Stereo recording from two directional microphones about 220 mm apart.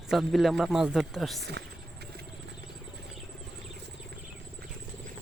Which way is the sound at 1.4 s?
50° right (ahead or behind).